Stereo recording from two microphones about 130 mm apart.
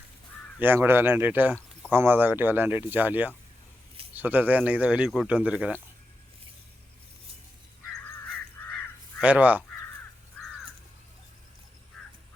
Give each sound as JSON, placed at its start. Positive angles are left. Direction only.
{"t": 0.6, "sound": "speech", "side_deg": -15}
{"t": 8.6, "sound": "crow", "side_deg": 20}
{"t": 9.2, "sound": "speech", "side_deg": -10}